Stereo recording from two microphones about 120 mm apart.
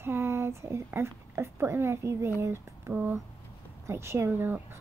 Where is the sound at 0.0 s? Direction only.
20° right (ahead or behind).